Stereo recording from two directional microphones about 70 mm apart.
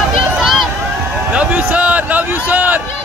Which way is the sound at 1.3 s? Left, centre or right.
Centre.